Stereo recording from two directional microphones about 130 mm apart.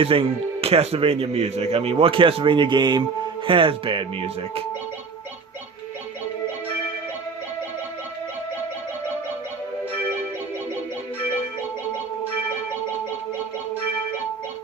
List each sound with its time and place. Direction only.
0.0 s speech: 45° right (ahead or behind)